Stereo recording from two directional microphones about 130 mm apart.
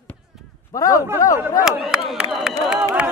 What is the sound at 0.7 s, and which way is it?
Speech, 30° left (ahead or behind).